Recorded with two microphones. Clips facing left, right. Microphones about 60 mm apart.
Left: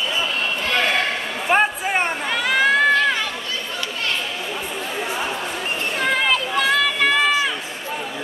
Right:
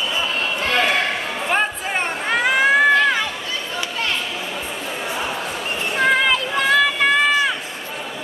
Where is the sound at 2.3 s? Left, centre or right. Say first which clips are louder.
Right 3 dB; right.